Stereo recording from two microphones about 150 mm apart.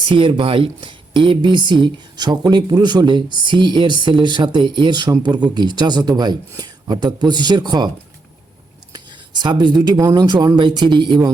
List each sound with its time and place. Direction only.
0.0 s speech: 35° right (ahead or behind)
9.4 s speech: 30° right (ahead or behind)